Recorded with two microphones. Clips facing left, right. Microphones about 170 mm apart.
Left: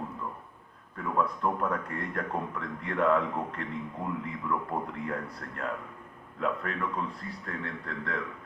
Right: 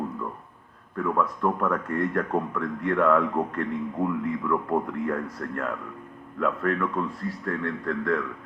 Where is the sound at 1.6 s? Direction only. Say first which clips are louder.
Right 6 dB; 45° right (ahead or behind).